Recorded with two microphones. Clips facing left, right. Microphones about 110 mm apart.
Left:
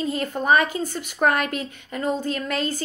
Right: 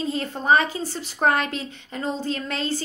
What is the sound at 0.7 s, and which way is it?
Speech, 50° left (ahead or behind).